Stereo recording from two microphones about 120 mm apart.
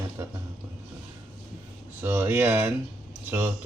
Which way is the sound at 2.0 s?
20° right (ahead or behind).